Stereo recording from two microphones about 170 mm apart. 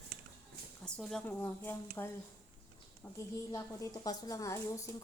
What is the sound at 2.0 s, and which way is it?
Speech, 15° left (ahead or behind).